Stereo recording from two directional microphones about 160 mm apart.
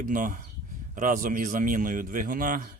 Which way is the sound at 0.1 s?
55° right (ahead or behind).